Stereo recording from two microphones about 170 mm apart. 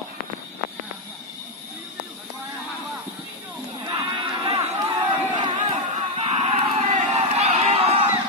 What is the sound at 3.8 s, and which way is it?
Cattle, 25° right (ahead or behind).